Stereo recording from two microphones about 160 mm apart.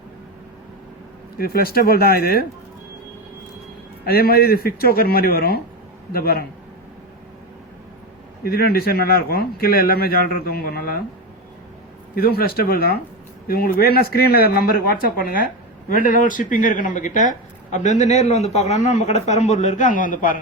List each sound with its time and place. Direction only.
1.4 s a man's voice: 70° left (ahead or behind)
4.0 s a man's voice: 70° left (ahead or behind)
8.4 s a man's voice: 75° left (ahead or behind)
12.1 s a man's voice: 70° left (ahead or behind)